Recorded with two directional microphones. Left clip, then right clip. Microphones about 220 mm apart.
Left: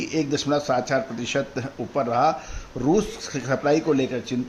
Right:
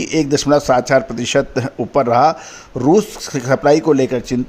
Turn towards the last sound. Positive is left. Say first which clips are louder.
# right 8 dB
turn(degrees=-35)  # may be behind; listen again after turning